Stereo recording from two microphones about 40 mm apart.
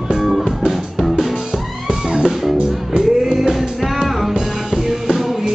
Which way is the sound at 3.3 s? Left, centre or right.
Centre.